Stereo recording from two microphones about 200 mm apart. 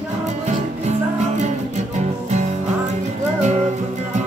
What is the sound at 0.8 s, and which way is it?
Music, 35° right (ahead or behind).